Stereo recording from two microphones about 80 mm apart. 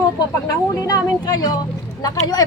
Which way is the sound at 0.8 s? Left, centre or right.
Left.